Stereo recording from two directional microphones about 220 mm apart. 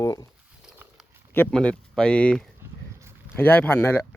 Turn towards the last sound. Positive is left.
turn(degrees=10)  # may be behind; listen again after turning